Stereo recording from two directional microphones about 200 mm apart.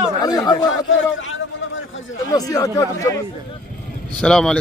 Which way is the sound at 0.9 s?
75° left (ahead or behind).